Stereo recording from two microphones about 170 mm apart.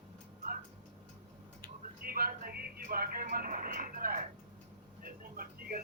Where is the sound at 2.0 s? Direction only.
60° right (ahead or behind).